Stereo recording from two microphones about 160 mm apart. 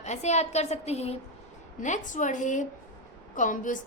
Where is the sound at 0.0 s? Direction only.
45° left (ahead or behind).